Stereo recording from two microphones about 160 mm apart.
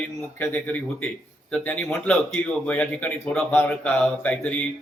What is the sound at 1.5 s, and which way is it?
A man's voice, 10° left (ahead or behind).